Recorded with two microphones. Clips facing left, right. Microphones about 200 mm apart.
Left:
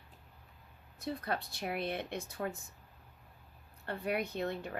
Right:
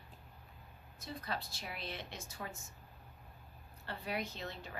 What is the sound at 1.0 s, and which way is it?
A woman's voice, 60° left (ahead or behind).